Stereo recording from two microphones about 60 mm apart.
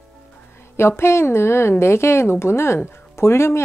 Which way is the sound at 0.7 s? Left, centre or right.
Left.